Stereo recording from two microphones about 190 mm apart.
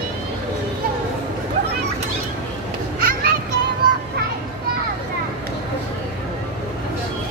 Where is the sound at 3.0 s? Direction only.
50° right (ahead or behind).